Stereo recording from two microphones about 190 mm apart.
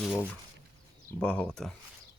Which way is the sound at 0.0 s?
10° left (ahead or behind).